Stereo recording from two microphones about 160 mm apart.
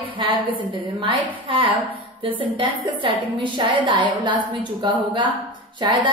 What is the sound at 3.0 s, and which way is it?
A woman's voice, 30° right (ahead or behind).